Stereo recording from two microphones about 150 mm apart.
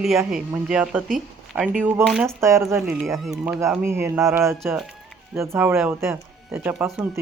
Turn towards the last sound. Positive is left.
turn(degrees=0)  # may be behind; listen again after turning